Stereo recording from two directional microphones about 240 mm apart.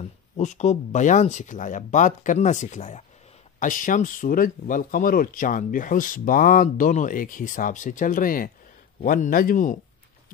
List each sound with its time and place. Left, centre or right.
0.4 s speech: left